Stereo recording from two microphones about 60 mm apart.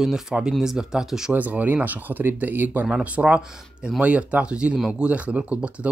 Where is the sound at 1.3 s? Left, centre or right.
Right.